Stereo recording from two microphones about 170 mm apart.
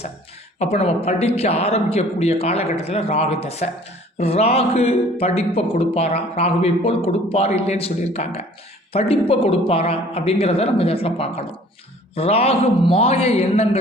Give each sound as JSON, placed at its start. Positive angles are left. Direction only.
{"t": 0.6, "sound": "speech", "side_deg": 40}